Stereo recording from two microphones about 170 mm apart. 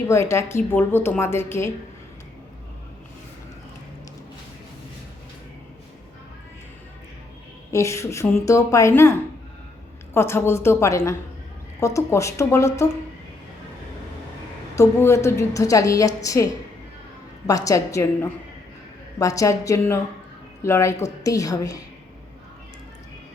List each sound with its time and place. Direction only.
0.1 s a woman's voice: 15° left (ahead or behind)
7.7 s a woman's voice: 15° left (ahead or behind)
10.2 s a woman's voice: 15° left (ahead or behind)
14.8 s a woman's voice: 15° left (ahead or behind)